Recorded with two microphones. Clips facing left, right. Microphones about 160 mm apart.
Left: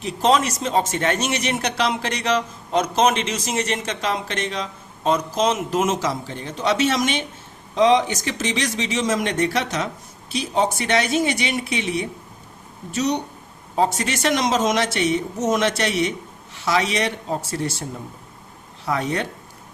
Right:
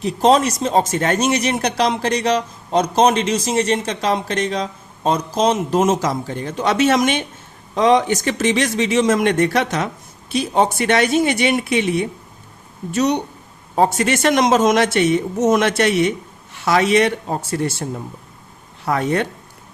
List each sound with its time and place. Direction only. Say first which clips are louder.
0.0 s speech: right 4 dB; 40° right (ahead or behind)
18.9 s speech: right 5 dB; 55° right (ahead or behind)